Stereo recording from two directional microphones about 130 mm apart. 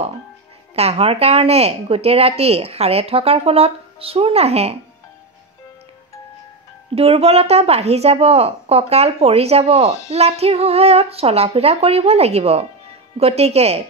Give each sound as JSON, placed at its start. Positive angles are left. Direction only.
{"t": 0.7, "sound": "speech", "side_deg": -50}
{"t": 7.0, "sound": "speech", "side_deg": -50}